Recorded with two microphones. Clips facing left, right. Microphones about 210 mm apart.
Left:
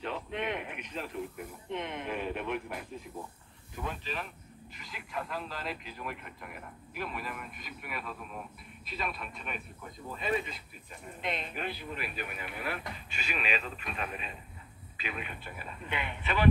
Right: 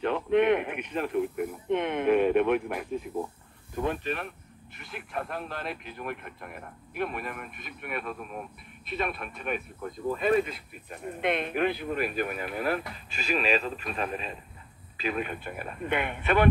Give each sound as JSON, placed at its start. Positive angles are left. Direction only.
{"t": 0.0, "sound": "snake", "side_deg": -60}
{"t": 3.7, "sound": "speech", "side_deg": -55}